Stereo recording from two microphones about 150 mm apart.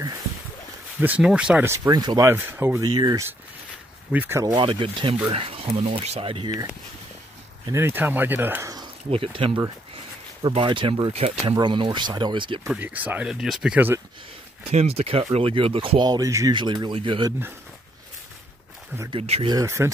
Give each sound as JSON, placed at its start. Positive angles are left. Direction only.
{"t": 0.9, "sound": "speech", "side_deg": -10}
{"t": 1.9, "sound": "speech", "side_deg": -30}
{"t": 2.2, "sound": "speech", "side_deg": -15}
{"t": 4.6, "sound": "speech", "side_deg": -35}
{"t": 6.4, "sound": "speech", "side_deg": -25}
{"t": 9.1, "sound": "speech", "side_deg": -35}
{"t": 10.5, "sound": "speech", "side_deg": -35}
{"t": 12.6, "sound": "speech", "side_deg": -10}
{"t": 14.6, "sound": "speech", "side_deg": -45}
{"t": 19.0, "sound": "speech", "side_deg": -40}
{"t": 19.4, "sound": "speech", "side_deg": -20}